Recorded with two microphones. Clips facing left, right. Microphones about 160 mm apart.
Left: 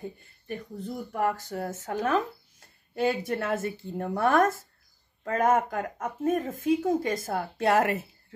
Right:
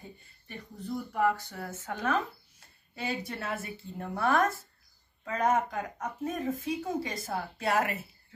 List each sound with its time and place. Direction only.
0.5 s speech: 50° left (ahead or behind)
2.9 s a sound: 50° left (ahead or behind)
3.3 s speech: 50° left (ahead or behind)